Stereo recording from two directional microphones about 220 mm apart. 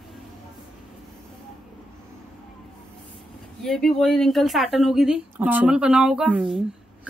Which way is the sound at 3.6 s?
Centre (ahead or behind).